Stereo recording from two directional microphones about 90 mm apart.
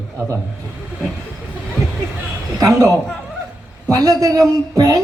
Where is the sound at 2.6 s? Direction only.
40° right (ahead or behind).